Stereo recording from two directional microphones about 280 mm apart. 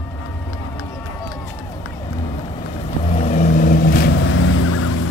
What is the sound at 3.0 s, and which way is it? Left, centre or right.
Vehicle, left.